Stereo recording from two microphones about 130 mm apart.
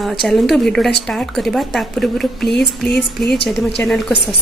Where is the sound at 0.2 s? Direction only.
Centre (ahead or behind).